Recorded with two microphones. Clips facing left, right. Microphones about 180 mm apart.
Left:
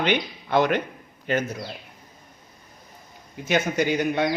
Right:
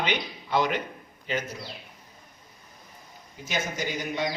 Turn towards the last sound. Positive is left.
turn(degrees=60)  # may be behind; listen again after turning